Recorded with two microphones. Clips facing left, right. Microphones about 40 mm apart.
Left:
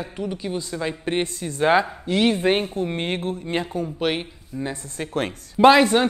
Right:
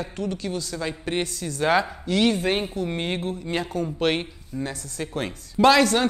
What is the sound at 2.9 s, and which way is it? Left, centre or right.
Speech, left.